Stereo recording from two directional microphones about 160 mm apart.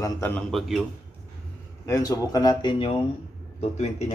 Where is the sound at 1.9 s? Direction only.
20° left (ahead or behind).